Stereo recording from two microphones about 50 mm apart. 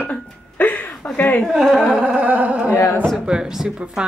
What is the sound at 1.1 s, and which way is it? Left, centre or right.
Speech, left.